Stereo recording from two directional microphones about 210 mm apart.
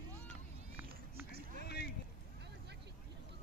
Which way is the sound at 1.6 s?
50° left (ahead or behind).